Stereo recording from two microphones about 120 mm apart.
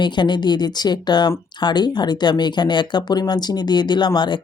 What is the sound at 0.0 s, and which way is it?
Speech, 40° left (ahead or behind).